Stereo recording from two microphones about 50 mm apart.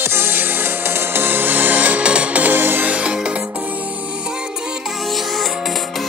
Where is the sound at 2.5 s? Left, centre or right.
Right.